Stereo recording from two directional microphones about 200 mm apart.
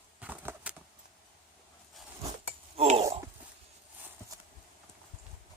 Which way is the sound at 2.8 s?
30° right (ahead or behind).